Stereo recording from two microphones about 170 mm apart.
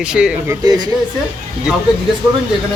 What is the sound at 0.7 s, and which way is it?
Speech, 25° right (ahead or behind).